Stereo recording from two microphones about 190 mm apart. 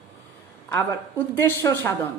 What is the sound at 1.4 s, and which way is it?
Speech, 15° left (ahead or behind).